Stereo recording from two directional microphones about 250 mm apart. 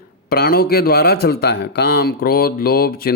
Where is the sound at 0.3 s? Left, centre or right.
Left.